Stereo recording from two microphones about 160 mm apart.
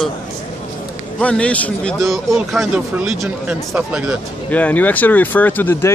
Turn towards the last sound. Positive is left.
turn(degrees=15)  # may be behind; listen again after turning